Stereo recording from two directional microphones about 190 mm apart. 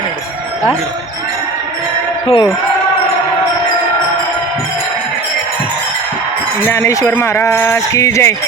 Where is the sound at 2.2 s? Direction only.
30° left (ahead or behind).